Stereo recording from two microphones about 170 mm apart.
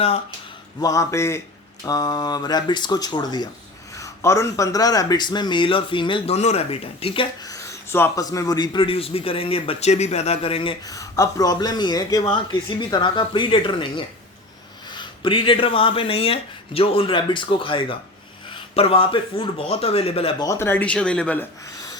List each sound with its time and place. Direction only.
0.8 s a man's voice: 20° left (ahead or behind); by 20.3 s 35° left (ahead or behind)
20.4 s speech: 15° left (ahead or behind)